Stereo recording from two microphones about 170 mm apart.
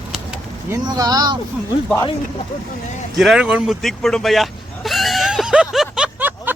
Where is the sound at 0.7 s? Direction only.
20° right (ahead or behind).